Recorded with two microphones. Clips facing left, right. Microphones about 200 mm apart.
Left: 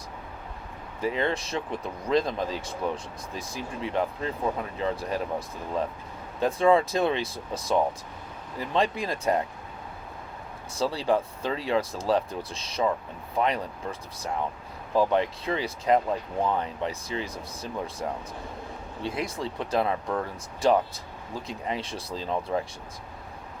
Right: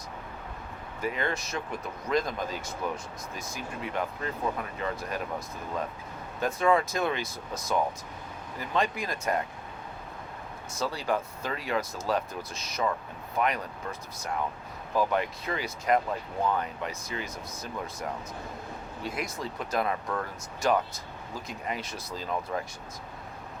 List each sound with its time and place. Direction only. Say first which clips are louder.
1.0 s speech: left 4 dB; 30° left (ahead or behind)
6.4 s speech: left 4 dB; 30° left (ahead or behind)
10.8 s speech: left 5 dB; 30° left (ahead or behind)
14.9 s speech: left 4 dB; 30° left (ahead or behind)